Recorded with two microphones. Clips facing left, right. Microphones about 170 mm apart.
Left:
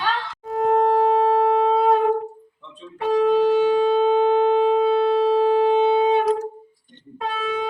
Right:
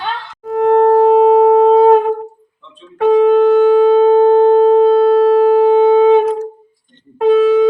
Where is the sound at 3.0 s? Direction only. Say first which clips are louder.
Right 8 dB; 55° right (ahead or behind).